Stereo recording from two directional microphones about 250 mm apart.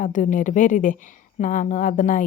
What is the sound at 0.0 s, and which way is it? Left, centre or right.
A woman's voice, left.